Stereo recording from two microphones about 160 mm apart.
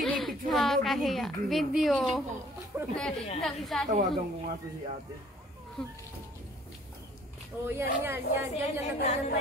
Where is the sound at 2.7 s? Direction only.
10° right (ahead or behind).